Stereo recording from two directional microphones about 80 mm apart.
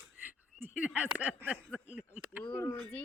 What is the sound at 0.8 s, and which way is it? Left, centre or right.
Speech, centre.